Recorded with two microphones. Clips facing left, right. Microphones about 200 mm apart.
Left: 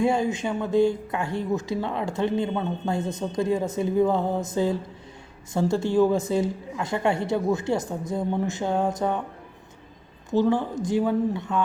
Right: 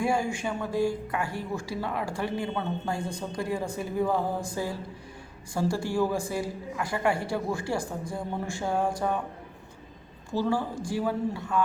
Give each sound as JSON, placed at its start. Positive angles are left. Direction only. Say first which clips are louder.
{"t": 0.0, "sound": "speech", "louder": "left 4 dB", "side_deg": 20}
{"t": 10.3, "sound": "speech", "louder": "left 5 dB", "side_deg": 20}